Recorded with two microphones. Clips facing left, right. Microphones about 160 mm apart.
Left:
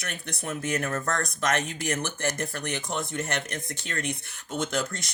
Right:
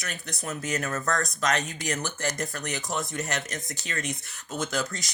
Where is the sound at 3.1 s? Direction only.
60° left (ahead or behind).